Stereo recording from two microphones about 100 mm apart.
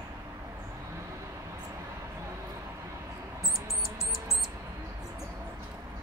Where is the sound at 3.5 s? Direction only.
Centre (ahead or behind).